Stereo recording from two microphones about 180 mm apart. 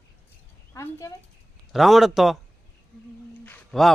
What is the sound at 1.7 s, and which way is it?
Speech, centre (ahead or behind).